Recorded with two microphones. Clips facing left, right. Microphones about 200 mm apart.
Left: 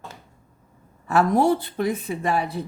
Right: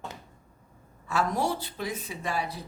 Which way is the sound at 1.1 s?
55° left (ahead or behind).